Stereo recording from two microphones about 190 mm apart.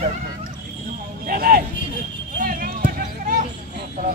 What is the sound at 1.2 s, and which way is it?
Speech, 50° right (ahead or behind).